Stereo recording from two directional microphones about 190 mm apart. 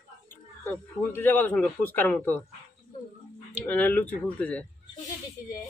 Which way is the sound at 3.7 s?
10° left (ahead or behind).